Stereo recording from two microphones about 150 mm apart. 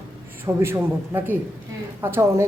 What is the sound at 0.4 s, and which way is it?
Speech, 15° right (ahead or behind).